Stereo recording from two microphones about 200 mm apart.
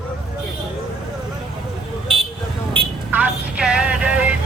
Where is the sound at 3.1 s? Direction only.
5° right (ahead or behind).